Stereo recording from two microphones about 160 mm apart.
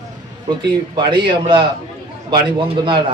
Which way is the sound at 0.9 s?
30° right (ahead or behind).